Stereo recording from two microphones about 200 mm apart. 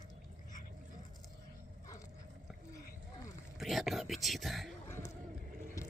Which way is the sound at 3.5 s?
Centre (ahead or behind).